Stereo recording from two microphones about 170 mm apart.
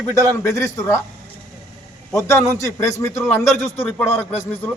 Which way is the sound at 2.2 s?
15° left (ahead or behind).